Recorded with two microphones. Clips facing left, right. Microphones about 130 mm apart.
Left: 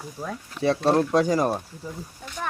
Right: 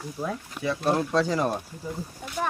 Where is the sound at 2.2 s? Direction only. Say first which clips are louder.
Right 4 dB; 5° right (ahead or behind).